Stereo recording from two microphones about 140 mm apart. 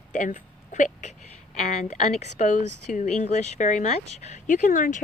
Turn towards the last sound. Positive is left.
turn(degrees=65)  # may be behind; listen again after turning